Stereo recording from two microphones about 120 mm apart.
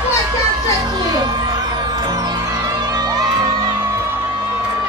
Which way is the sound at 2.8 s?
35° right (ahead or behind).